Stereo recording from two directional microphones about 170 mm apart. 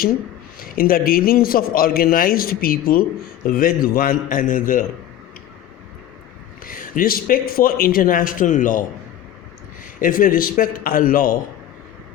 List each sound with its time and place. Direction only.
0.6 s a man's voice: 55° left (ahead or behind)
6.7 s a man's voice: 55° left (ahead or behind)
10.0 s a man's voice: 55° left (ahead or behind)